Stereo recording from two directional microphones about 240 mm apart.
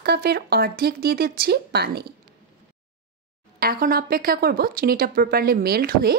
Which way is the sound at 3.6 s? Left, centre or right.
Right.